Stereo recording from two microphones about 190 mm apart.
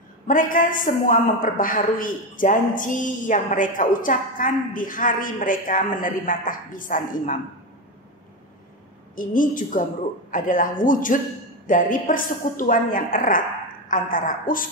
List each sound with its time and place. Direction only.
0.3 s a man's voice: 45° left (ahead or behind)
9.1 s a man's voice: 45° left (ahead or behind)